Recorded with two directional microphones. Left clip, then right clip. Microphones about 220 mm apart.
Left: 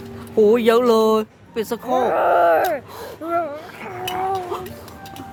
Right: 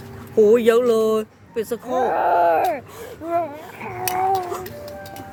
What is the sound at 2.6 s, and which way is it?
Speech, centre (ahead or behind).